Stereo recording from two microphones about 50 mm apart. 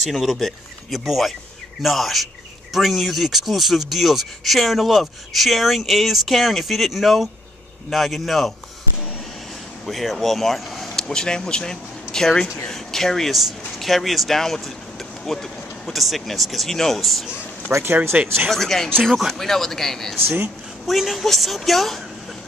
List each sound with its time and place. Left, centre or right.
0.0 s speech: centre
9.8 s speech: centre
17.8 s speech: right
18.5 s speech: centre